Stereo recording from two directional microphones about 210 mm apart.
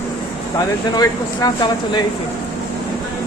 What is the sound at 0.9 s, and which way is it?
Speech, 20° left (ahead or behind).